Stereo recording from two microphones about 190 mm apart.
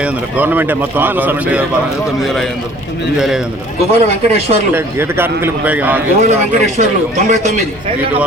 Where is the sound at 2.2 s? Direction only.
Centre (ahead or behind).